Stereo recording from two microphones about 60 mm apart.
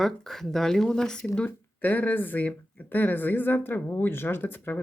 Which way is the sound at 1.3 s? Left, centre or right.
Left.